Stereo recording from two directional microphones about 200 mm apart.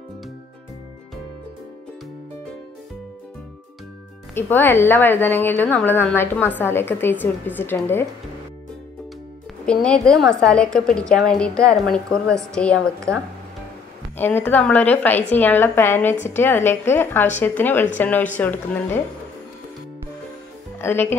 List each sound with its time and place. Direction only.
4.4 s a woman's voice: 10° left (ahead or behind)
9.7 s a woman's voice: 5° left (ahead or behind)
20.8 s a woman's voice: 10° left (ahead or behind)